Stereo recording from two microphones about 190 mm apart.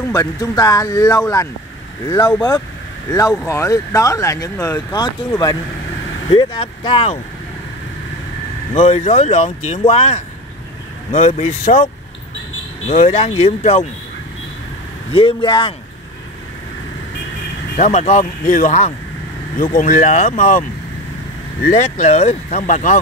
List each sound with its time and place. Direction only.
0.1 s speech: 20° left (ahead or behind)
8.7 s speech: 35° left (ahead or behind)
12.8 s speech: 35° left (ahead or behind)
15.1 s speech: 25° left (ahead or behind)
17.7 s speech: 35° left (ahead or behind)
21.6 s speech: 40° left (ahead or behind)